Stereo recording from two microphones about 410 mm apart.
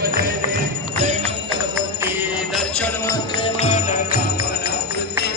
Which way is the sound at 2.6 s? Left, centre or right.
Centre.